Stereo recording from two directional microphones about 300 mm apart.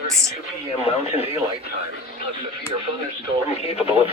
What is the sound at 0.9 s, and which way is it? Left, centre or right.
Speech, centre.